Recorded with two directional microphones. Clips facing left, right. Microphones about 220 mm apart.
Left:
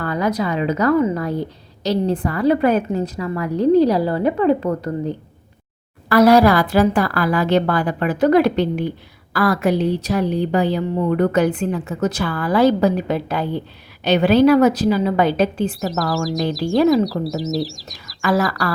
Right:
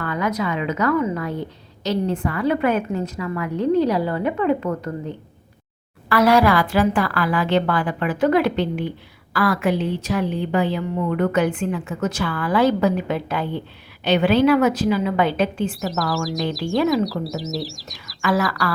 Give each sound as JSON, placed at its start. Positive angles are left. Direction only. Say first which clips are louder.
{"t": 0.0, "sound": "a woman's voice", "louder": "left 3 dB", "side_deg": 35}
{"t": 15.8, "sound": "speech", "louder": "left 2 dB", "side_deg": 0}
{"t": 18.2, "sound": "a woman's voice", "louder": "left 2 dB", "side_deg": 40}